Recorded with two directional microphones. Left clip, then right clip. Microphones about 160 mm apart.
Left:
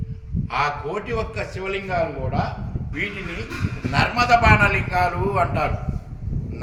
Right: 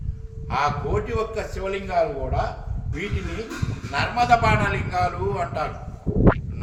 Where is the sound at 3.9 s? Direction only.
Centre (ahead or behind).